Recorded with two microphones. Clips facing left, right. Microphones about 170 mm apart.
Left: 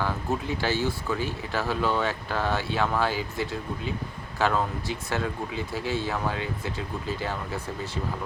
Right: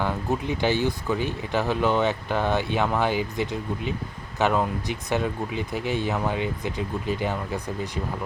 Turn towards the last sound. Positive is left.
turn(degrees=-15)  # may be behind; listen again after turning